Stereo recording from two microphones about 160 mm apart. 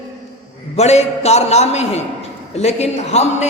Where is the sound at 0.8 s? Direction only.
40° left (ahead or behind).